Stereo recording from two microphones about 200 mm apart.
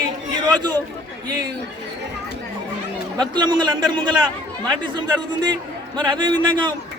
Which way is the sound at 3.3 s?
20° right (ahead or behind).